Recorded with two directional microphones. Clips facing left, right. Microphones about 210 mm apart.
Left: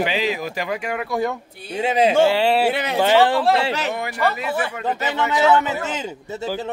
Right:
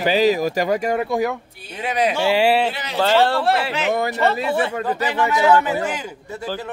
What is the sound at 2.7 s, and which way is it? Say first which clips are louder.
Speech: left 7 dB; 55° left (ahead or behind).